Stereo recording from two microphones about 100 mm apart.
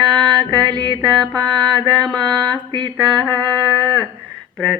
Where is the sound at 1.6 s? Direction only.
50° right (ahead or behind).